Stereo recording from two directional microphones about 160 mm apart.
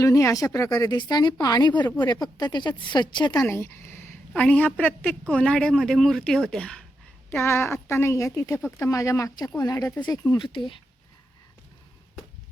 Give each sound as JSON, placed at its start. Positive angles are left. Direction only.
{"t": 0.0, "sound": "speech", "side_deg": 20}
{"t": 3.4, "sound": "a woman's voice", "side_deg": 15}